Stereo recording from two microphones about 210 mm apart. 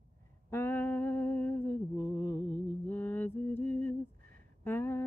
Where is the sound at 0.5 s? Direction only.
10° left (ahead or behind).